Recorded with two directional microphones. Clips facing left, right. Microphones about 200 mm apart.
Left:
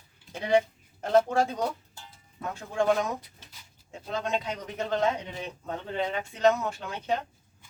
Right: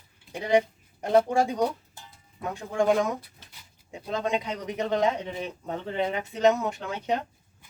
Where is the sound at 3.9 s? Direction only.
15° right (ahead or behind).